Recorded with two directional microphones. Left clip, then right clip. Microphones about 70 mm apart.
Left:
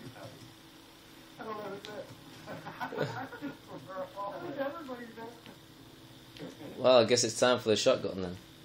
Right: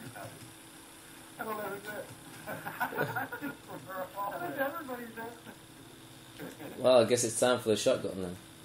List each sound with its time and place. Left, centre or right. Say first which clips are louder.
1.4 s a sound: right 3 dB; right
2.9 s speech: right 1 dB; centre
3.2 s speech: right 4 dB; right
6.8 s speech: left 1 dB; centre